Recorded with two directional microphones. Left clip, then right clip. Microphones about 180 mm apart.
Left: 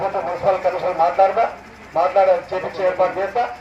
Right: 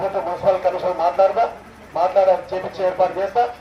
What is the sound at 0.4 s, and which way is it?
A man's voice, 25° left (ahead or behind).